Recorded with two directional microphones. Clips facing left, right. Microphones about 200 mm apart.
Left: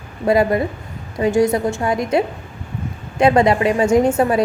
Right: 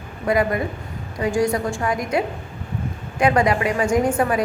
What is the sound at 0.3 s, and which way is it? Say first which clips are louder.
A woman's voice: left 4 dB; 30° left (ahead or behind).